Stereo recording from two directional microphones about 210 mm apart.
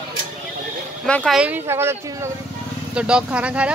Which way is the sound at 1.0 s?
5° left (ahead or behind).